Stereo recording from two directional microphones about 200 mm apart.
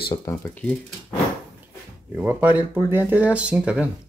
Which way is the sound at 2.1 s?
10° right (ahead or behind).